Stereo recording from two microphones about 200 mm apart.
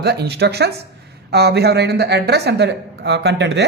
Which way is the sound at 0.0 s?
55° right (ahead or behind).